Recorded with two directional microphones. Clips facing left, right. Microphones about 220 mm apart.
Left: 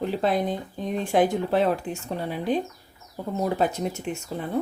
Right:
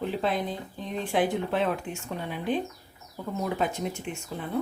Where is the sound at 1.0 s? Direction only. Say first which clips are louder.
Left 4 dB; 45° left (ahead or behind).